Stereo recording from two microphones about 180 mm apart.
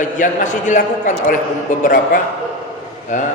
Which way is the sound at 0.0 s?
45° left (ahead or behind).